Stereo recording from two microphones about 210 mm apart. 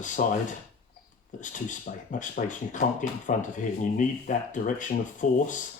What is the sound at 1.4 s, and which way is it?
A man's voice, 35° left (ahead or behind).